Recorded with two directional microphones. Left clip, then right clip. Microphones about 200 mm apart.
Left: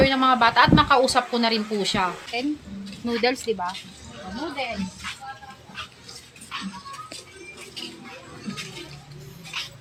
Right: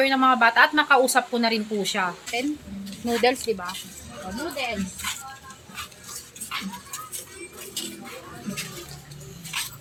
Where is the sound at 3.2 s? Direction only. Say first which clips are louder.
Right 1 dB; 25° left (ahead or behind).